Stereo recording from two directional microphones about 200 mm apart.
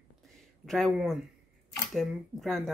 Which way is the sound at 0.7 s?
Centre (ahead or behind).